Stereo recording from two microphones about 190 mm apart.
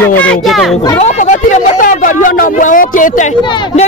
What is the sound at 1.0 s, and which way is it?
Speech, 40° left (ahead or behind).